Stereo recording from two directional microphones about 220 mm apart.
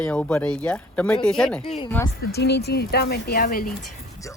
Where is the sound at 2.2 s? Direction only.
45° left (ahead or behind).